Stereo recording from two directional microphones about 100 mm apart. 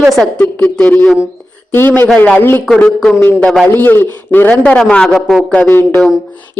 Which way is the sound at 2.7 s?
5° left (ahead or behind).